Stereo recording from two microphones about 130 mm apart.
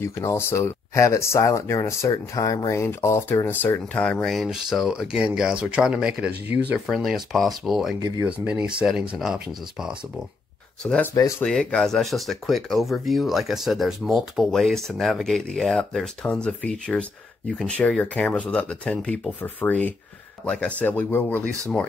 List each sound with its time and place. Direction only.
0.0 s speech: 20° left (ahead or behind); by 6.8 s 10° right (ahead or behind)
6.9 s speech: centre (ahead or behind)
10.8 s speech: 5° left (ahead or behind)
11.1 s speech: 25° left (ahead or behind)
11.4 s speech: 5° left (ahead or behind)